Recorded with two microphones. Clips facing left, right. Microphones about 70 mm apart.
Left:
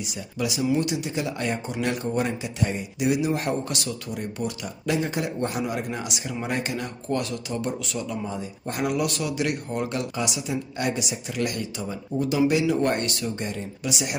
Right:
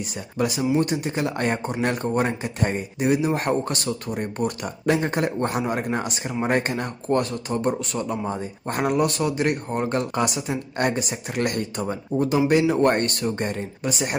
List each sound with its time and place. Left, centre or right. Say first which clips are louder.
0.0 s speech: right 4 dB; right